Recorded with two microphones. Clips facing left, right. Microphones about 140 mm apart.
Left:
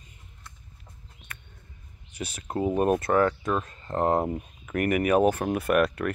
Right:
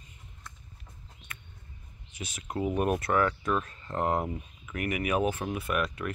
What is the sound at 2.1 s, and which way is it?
Speech, 30° left (ahead or behind).